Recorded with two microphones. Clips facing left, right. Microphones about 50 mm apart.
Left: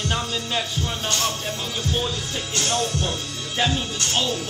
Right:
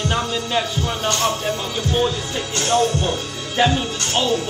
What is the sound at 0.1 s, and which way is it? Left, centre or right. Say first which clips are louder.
Speech: right 4 dB; centre.